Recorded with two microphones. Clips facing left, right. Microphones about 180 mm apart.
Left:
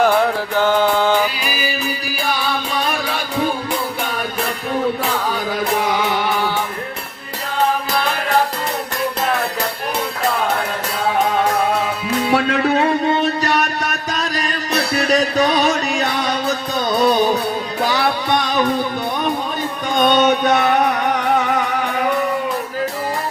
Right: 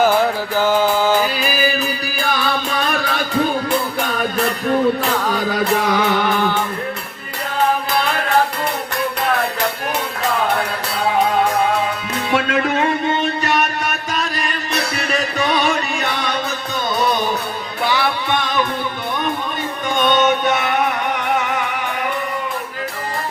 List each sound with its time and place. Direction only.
0.0 s music: centre (ahead or behind)
12.3 s music: 35° left (ahead or behind)
14.7 s music: 35° left (ahead or behind)
17.8 s music: 40° left (ahead or behind)
20.0 s music: 35° left (ahead or behind)